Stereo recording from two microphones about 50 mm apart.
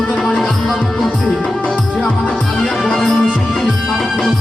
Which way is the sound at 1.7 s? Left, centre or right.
Left.